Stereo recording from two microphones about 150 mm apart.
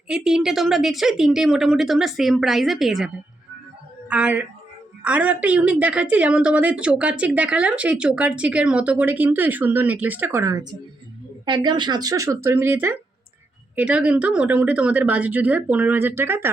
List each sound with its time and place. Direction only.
0.1 s a woman's voice: 5° right (ahead or behind)
4.1 s a woman's voice: 10° right (ahead or behind)
10.4 s a woman's voice: 25° right (ahead or behind)